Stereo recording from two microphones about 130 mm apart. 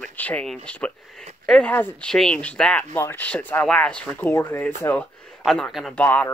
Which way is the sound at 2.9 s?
20° left (ahead or behind).